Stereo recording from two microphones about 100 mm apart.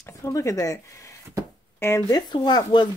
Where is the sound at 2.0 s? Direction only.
45° left (ahead or behind).